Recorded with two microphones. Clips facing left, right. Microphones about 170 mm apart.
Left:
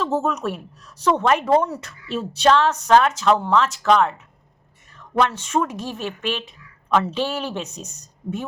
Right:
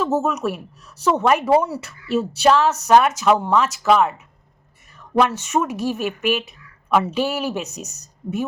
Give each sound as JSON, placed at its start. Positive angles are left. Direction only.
{"t": 0.0, "sound": "a woman's voice", "side_deg": -5}
{"t": 5.1, "sound": "a woman's voice", "side_deg": -10}
{"t": 7.7, "sound": "a woman's voice", "side_deg": -75}